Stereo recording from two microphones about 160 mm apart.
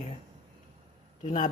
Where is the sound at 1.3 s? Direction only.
55° left (ahead or behind).